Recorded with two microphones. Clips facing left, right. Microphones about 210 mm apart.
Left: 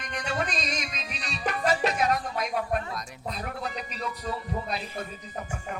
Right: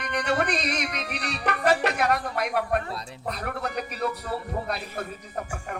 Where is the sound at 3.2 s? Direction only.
65° right (ahead or behind).